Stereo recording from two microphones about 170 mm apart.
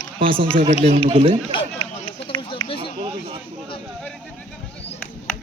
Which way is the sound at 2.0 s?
30° left (ahead or behind).